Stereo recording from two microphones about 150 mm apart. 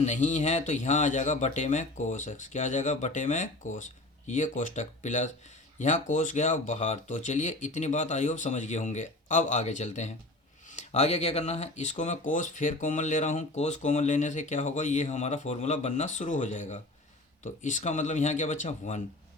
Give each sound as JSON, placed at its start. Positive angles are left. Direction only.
{"t": 0.0, "sound": "speech", "side_deg": 55}